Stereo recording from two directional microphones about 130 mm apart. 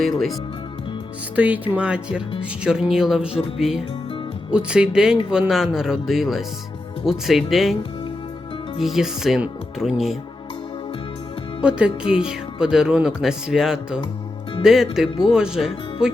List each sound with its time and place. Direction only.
0.0 s speech: centre (ahead or behind)
1.4 s speech: 10° right (ahead or behind)
4.5 s speech: 5° right (ahead or behind)
8.8 s speech: centre (ahead or behind)
11.6 s speech: 10° right (ahead or behind)